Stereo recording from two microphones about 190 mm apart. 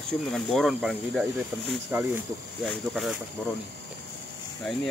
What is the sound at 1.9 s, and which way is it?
Speech, 10° right (ahead or behind).